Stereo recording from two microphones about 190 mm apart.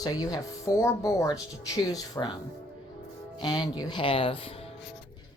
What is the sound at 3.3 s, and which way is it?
Speech, 20° left (ahead or behind).